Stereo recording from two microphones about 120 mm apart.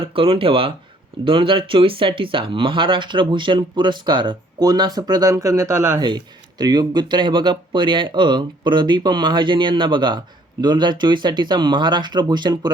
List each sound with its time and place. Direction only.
0.0 s speech: 50° right (ahead or behind); by 6.0 s 20° right (ahead or behind)
6.0 s speech: 35° right (ahead or behind)